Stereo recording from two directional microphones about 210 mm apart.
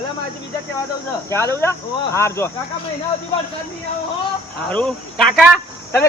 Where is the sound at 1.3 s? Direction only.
10° left (ahead or behind).